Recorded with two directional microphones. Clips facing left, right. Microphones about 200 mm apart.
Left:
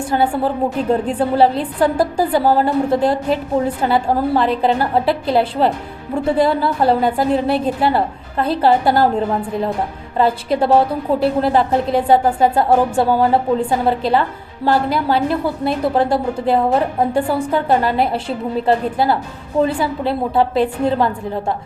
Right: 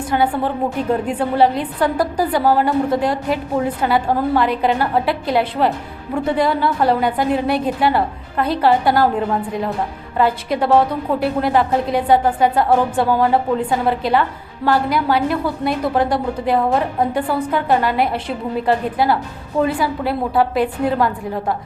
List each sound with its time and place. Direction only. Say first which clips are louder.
0.1 s a woman's voice: left 1 dB; 30° left (ahead or behind)